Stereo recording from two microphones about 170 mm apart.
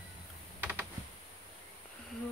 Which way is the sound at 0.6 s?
10° right (ahead or behind).